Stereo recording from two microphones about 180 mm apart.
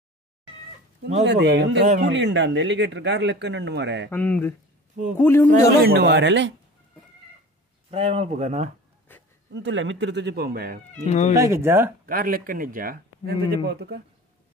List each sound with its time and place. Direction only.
1.2 s speech: 75° right (ahead or behind)
4.1 s speech: 10° left (ahead or behind)
5.8 s speech: 70° right (ahead or behind)
7.9 s speech: 35° right (ahead or behind)
9.5 s speech: 90° right; by 10.8 s 60° right (ahead or behind)
11.1 s speech: 40° left (ahead or behind)
11.3 s speech: 15° right (ahead or behind)
12.1 s speech: 50° right (ahead or behind)
13.5 s speech: 65° right (ahead or behind)